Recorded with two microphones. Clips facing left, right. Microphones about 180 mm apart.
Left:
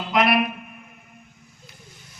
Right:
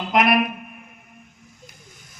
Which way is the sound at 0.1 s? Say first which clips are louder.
Right 1 dB; 45° right (ahead or behind).